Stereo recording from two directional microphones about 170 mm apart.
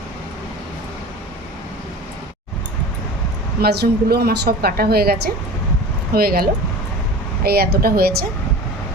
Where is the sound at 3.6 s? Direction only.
70° right (ahead or behind).